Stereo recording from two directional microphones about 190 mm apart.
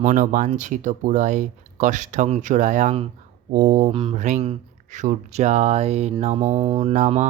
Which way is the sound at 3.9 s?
25° right (ahead or behind).